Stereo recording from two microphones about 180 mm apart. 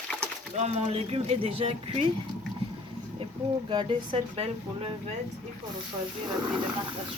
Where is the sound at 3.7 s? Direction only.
25° right (ahead or behind).